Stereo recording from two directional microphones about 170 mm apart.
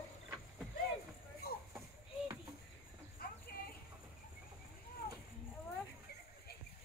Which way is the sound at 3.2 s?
60° left (ahead or behind).